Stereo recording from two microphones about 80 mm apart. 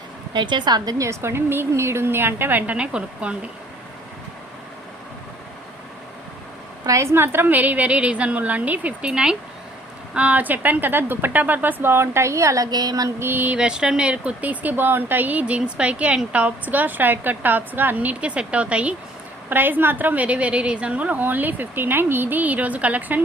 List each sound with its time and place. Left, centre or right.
0.3 s a woman's voice: right
0.9 s a woman's voice: right; by 3.3 s centre
6.8 s a woman's voice: right
12.7 s a sound: right
13.1 s a woman's voice: right